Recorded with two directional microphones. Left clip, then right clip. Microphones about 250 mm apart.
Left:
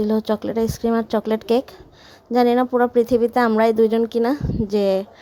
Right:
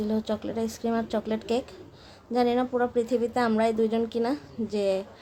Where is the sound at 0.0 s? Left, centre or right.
Left.